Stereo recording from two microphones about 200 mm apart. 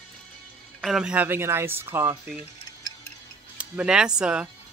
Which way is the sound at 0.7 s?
Centre (ahead or behind).